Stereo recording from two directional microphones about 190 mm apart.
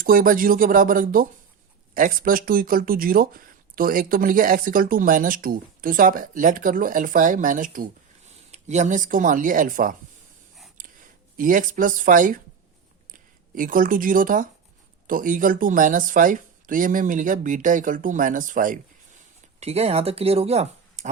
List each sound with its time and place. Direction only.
0.0 s speech: 50° right (ahead or behind)
11.3 s speech: 45° right (ahead or behind)
13.6 s speech: 45° right (ahead or behind)
19.5 s speech: 35° right (ahead or behind)